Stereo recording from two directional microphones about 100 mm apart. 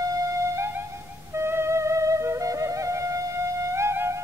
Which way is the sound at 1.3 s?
25° right (ahead or behind).